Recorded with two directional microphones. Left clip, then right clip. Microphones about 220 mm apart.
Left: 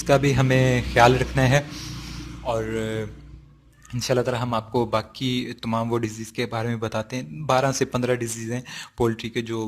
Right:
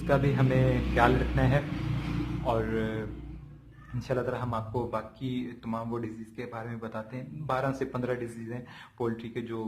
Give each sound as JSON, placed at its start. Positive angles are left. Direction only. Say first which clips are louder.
{"t": 0.1, "sound": "a man's voice", "louder": "left 7 dB", "side_deg": 30}
{"t": 2.5, "sound": "a man's voice", "louder": "left 5 dB", "side_deg": 25}